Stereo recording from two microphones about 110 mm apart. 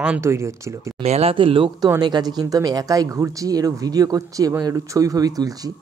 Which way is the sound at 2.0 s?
40° right (ahead or behind).